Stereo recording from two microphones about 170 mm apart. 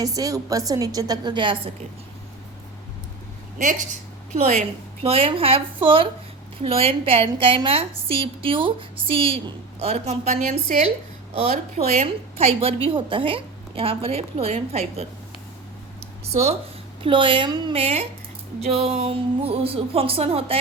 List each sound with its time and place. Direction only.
0.0 s a woman's voice: 20° right (ahead or behind)
4.3 s a woman's voice: 40° right (ahead or behind)
16.2 s a woman's voice: 40° right (ahead or behind)